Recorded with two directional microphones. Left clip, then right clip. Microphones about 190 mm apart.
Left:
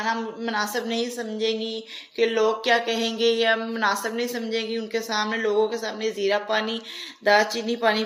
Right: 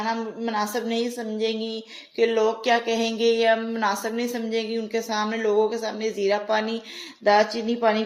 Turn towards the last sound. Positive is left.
turn(degrees=-50)  # may be behind; listen again after turning